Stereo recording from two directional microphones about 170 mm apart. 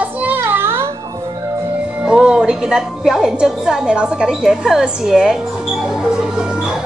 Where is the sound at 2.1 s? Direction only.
5° right (ahead or behind).